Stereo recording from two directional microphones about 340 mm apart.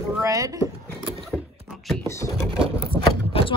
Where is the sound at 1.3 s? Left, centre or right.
Centre.